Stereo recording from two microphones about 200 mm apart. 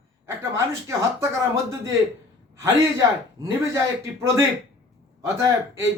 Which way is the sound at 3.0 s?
15° right (ahead or behind).